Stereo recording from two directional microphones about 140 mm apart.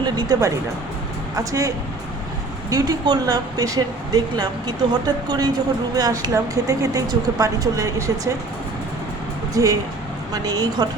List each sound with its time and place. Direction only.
0.0 s speech: 30° right (ahead or behind)
9.6 s speech: 25° right (ahead or behind)